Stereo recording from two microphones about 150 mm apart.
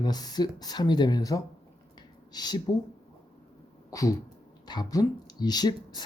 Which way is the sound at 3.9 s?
25° left (ahead or behind).